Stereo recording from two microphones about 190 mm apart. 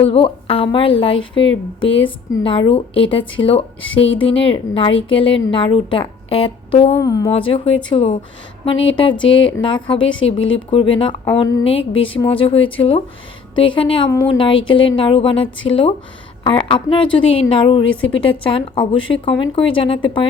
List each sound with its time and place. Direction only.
0.0 s a woman's voice: 30° left (ahead or behind)
3.8 s speech: 90° left
4.3 s a woman's voice: 30° left (ahead or behind)
6.9 s a woman's voice: 20° left (ahead or behind)
7.3 s a woman's voice: 30° left (ahead or behind)
10.1 s speech: 90° left
10.7 s a woman's voice: 30° left (ahead or behind)